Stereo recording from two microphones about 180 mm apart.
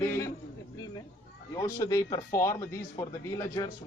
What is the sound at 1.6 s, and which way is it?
A man's voice, 20° left (ahead or behind).